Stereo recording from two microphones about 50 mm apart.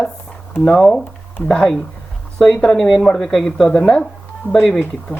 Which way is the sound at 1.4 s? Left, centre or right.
Centre.